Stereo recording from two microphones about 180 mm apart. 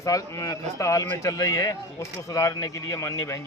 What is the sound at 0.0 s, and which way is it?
A man's voice, 20° left (ahead or behind).